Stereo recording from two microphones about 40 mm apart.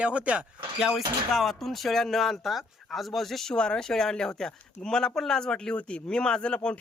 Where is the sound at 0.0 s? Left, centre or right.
Right.